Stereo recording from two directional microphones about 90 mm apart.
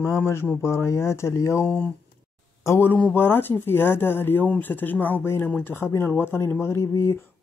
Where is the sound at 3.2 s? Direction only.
25° left (ahead or behind).